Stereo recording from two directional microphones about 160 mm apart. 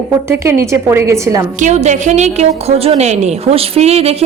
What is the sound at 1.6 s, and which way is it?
A woman's voice, 45° right (ahead or behind).